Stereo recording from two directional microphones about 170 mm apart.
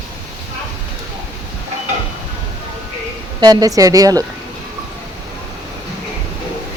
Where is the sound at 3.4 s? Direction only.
25° right (ahead or behind).